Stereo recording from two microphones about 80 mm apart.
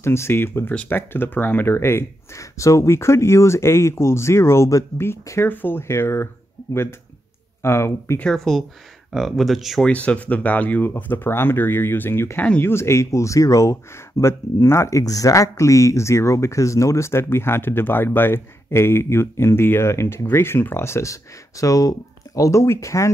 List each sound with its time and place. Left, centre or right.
0.0 s speech: left
8.2 s speech: centre
9.8 s speech: centre; by 23.1 s left